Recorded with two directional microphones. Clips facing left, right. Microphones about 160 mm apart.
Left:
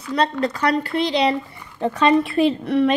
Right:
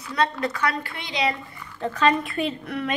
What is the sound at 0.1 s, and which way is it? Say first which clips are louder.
Speech: left 4 dB; 30° left (ahead or behind).